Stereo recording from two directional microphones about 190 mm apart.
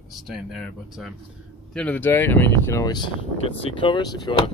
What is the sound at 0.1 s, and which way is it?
Speech, centre (ahead or behind).